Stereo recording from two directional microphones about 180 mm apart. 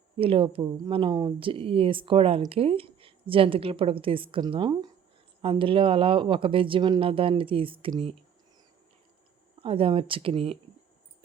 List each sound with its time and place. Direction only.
0.2 s speech: 30° right (ahead or behind)
9.6 s speech: 30° right (ahead or behind)